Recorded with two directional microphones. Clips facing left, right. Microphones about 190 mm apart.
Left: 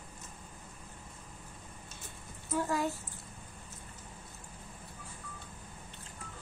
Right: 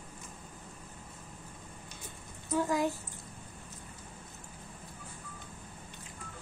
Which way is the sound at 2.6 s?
15° right (ahead or behind).